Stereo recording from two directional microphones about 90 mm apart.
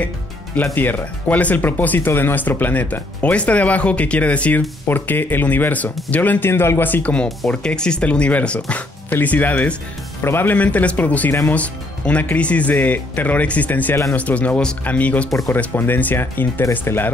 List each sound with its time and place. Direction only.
0.7 s speech: 20° left (ahead or behind)